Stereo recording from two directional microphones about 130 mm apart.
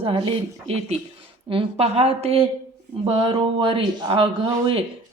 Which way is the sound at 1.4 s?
45° right (ahead or behind).